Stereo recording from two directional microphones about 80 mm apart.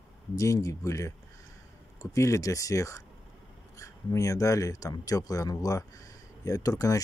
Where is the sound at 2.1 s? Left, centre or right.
Left.